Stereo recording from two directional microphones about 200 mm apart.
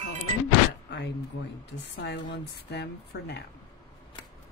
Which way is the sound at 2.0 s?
55° left (ahead or behind).